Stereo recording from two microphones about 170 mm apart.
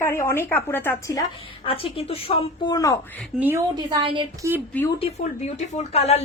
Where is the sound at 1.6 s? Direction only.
35° left (ahead or behind).